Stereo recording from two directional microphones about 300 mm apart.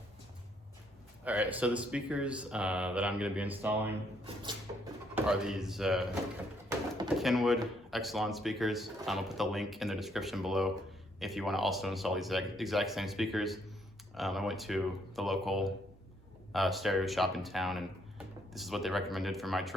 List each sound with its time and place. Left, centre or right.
1.2 s speech: centre
5.1 s speech: centre
7.2 s speech: centre